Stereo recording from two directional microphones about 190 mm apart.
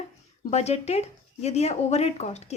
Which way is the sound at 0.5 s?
35° left (ahead or behind).